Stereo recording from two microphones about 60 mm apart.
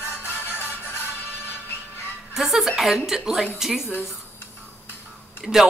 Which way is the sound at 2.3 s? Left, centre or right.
Centre.